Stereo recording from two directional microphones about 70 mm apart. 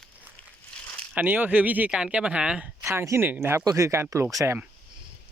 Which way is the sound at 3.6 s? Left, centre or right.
Right.